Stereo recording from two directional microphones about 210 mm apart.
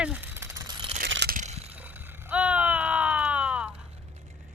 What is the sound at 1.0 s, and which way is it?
Crunch, 55° right (ahead or behind).